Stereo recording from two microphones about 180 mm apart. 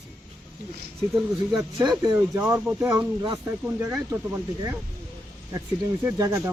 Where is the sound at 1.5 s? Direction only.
20° right (ahead or behind).